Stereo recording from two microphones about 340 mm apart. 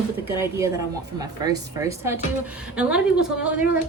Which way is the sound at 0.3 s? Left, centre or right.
Centre.